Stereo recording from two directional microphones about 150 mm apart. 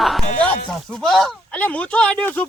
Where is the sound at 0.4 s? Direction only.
5° left (ahead or behind).